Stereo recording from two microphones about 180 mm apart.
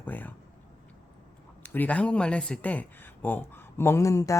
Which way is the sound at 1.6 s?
10° left (ahead or behind).